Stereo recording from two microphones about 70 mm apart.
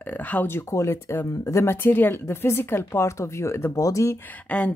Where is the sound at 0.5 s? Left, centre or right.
Left.